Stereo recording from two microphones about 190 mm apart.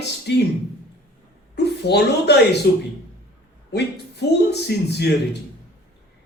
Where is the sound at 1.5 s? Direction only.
60° left (ahead or behind).